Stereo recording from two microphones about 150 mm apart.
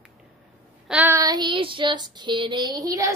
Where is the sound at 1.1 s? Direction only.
25° right (ahead or behind).